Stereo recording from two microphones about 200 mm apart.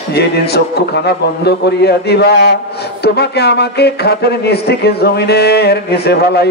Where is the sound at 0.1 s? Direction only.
55° left (ahead or behind).